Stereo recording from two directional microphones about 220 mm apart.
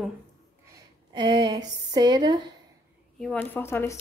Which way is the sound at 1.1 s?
20° right (ahead or behind).